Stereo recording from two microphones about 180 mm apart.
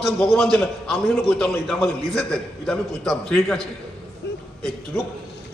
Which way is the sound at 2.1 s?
5° left (ahead or behind).